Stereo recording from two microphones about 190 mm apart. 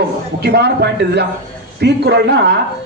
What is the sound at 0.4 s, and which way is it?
A man's voice, 60° right (ahead or behind).